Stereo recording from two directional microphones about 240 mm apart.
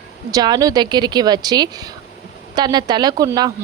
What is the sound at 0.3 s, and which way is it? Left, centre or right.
A woman's voice, centre.